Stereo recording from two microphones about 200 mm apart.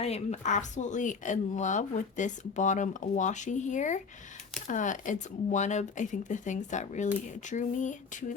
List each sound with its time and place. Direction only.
0.0 s speech: 35° left (ahead or behind)